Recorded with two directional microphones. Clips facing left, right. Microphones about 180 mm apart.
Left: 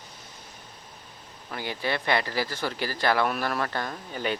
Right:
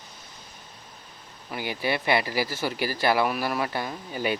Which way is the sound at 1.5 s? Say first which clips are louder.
Right 2 dB; 10° right (ahead or behind).